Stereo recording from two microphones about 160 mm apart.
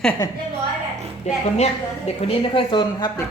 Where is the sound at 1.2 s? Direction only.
45° left (ahead or behind).